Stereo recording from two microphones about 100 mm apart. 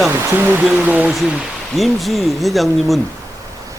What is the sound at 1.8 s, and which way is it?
Speech, centre (ahead or behind).